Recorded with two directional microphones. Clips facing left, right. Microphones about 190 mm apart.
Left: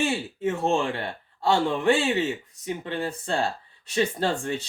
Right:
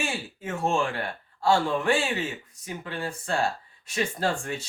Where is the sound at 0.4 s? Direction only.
25° left (ahead or behind).